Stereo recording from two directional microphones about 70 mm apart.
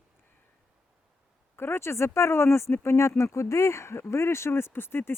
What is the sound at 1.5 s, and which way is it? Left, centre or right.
Speech, left.